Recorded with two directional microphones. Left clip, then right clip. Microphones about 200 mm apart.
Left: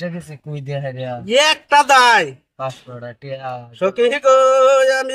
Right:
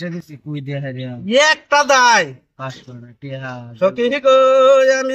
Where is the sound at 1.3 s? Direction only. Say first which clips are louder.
Even; 40° left (ahead or behind).